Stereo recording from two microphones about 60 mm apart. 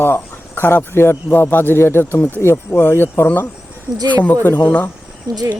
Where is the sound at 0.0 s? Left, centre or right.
Left.